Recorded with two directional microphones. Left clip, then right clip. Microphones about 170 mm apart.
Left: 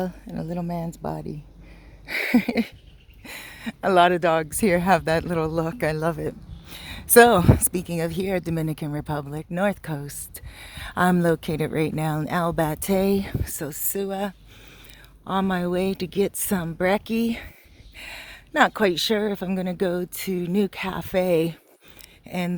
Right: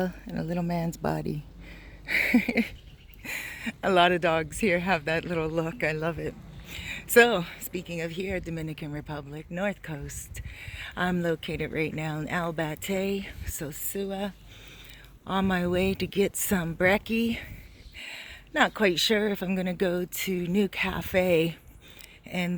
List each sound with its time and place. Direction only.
0.5 s speech: 5° left (ahead or behind)
2.0 s a woman's voice: 25° left (ahead or behind)
5.2 s speech: 15° left (ahead or behind); by 14.3 s 40° left (ahead or behind)
15.3 s speech: 20° left (ahead or behind)
17.1 s speech: 30° left (ahead or behind)